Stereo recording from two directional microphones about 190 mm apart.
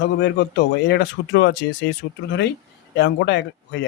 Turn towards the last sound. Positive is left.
turn(degrees=65)  # may be behind; listen again after turning